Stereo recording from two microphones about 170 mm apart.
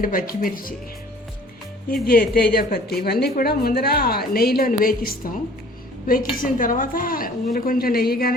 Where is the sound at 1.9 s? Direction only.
60° left (ahead or behind).